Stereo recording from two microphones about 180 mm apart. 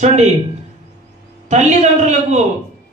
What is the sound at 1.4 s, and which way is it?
Speech, 40° right (ahead or behind).